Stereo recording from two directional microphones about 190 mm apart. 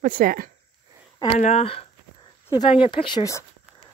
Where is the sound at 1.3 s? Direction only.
35° left (ahead or behind); by 3.4 s 20° left (ahead or behind).